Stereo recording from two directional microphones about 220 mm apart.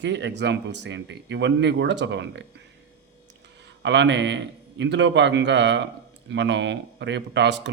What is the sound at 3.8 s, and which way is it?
A man's voice, 55° right (ahead or behind).